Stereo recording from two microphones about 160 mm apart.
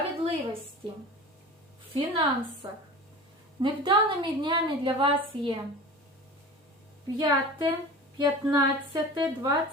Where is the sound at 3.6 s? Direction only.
30° right (ahead or behind).